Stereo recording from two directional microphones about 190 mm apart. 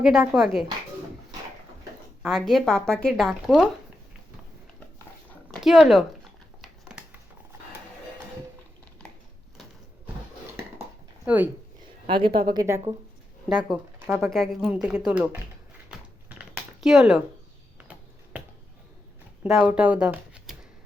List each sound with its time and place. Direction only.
0.0 s speech: 5° right (ahead or behind)
2.2 s speech: centre (ahead or behind)
5.5 s speech: centre (ahead or behind)
6.6 s a sound: 5° right (ahead or behind)
12.0 s a woman's voice: 25° right (ahead or behind)
13.5 s speech: 5° right (ahead or behind)
15.9 s typing: 5° right (ahead or behind)
19.5 s speech: 5° right (ahead or behind)